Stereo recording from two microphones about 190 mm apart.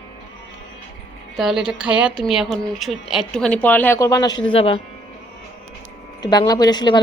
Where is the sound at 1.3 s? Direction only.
Centre (ahead or behind); by 4.7 s 30° left (ahead or behind).